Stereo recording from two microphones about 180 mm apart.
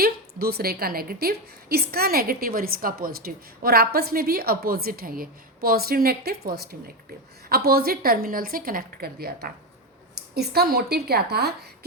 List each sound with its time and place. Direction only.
0.0 s a woman's voice: 60° right (ahead or behind)